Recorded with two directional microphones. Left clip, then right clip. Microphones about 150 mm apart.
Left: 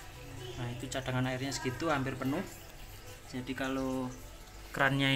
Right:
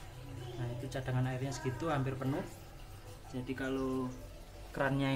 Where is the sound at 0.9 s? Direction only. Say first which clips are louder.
Left 5 dB; 20° left (ahead or behind).